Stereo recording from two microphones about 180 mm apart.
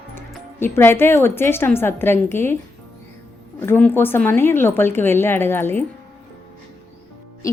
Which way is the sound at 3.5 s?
10° left (ahead or behind).